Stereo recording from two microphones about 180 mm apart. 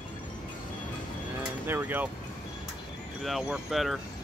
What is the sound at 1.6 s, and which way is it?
Speech, 10° right (ahead or behind).